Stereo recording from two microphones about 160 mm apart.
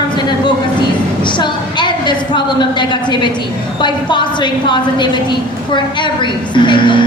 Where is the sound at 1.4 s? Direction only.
30° left (ahead or behind).